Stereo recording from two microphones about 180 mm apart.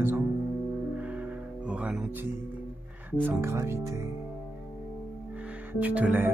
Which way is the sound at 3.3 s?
15° right (ahead or behind).